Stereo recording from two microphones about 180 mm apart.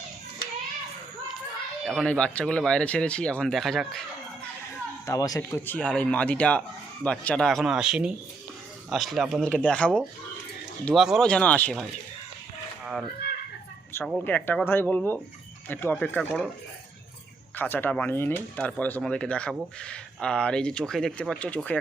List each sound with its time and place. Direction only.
1.8 s speech: centre (ahead or behind)
5.0 s speech: 20° left (ahead or behind)
12.8 s a sound: centre (ahead or behind)
14.0 s speech: 5° left (ahead or behind)
17.6 s speech: 10° left (ahead or behind)